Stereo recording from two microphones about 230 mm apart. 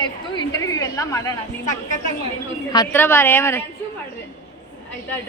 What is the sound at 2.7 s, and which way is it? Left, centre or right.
Speech, centre.